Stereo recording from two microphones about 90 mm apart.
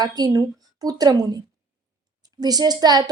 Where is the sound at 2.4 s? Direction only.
45° right (ahead or behind).